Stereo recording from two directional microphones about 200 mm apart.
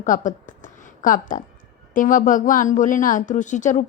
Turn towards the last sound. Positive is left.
turn(degrees=40)  # may be behind; listen again after turning